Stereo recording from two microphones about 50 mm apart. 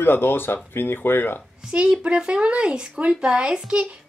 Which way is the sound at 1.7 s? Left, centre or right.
Centre.